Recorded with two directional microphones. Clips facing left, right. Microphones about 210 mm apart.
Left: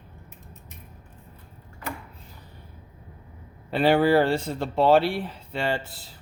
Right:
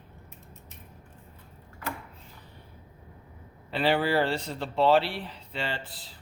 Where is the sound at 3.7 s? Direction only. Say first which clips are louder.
Left 6 dB; 45° left (ahead or behind).